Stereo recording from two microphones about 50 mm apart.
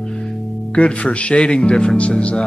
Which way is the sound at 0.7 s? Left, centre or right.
Left.